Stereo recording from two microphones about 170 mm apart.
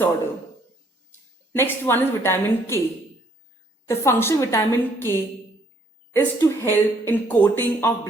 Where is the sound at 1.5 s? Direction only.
10° left (ahead or behind).